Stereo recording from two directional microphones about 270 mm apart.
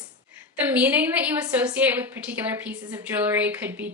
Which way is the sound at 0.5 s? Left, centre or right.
Centre.